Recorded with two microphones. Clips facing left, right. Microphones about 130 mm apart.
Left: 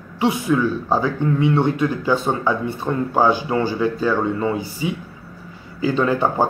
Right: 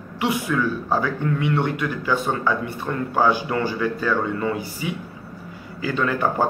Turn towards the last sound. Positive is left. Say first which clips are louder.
# left 3 dB
turn(degrees=25)  # may be behind; listen again after turning